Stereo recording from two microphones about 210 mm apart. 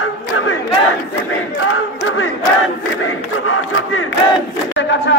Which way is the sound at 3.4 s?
80° left.